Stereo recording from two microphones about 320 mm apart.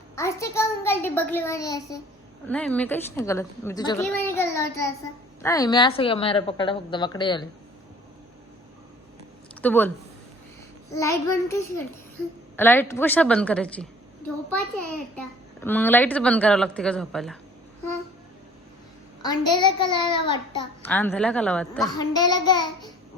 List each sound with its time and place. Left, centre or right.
0.2 s a child's voice: centre
9.6 s speech: centre
10.9 s a child's voice: centre
15.6 s a woman's voice: centre
19.2 s a child's voice: centre